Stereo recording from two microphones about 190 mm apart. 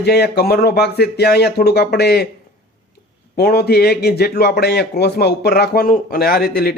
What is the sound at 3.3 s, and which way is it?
A man's voice, 55° left (ahead or behind).